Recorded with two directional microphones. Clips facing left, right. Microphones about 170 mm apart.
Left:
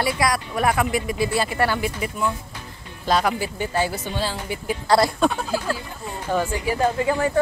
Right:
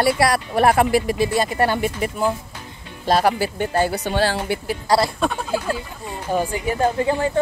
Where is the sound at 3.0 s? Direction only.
35° right (ahead or behind).